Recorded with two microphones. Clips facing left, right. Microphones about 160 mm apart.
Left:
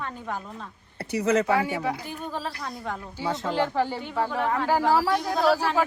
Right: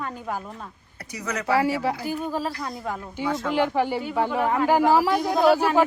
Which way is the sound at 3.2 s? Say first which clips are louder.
Right 3 dB; 20° left (ahead or behind).